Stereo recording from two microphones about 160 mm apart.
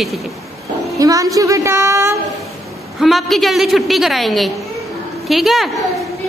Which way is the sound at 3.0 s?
Centre (ahead or behind).